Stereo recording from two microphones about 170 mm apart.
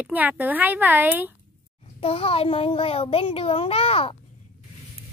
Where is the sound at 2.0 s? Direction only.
35° left (ahead or behind).